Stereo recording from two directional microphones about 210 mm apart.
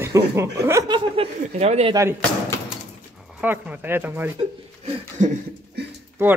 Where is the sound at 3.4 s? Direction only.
10° right (ahead or behind).